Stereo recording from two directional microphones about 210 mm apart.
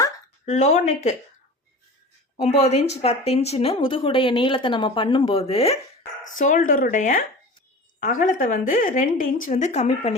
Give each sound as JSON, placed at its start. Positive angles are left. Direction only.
{"t": 0.4, "sound": "a woman's voice", "side_deg": 35}
{"t": 2.6, "sound": "a woman's voice", "side_deg": 30}
{"t": 6.4, "sound": "a woman's voice", "side_deg": 40}